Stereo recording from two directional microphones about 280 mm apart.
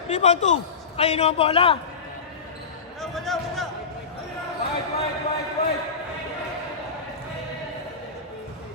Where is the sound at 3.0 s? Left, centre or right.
Centre.